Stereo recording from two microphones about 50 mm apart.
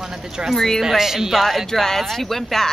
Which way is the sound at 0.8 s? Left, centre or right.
Centre.